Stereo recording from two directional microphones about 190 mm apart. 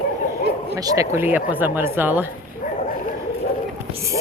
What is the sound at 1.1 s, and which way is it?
Speech, 10° right (ahead or behind).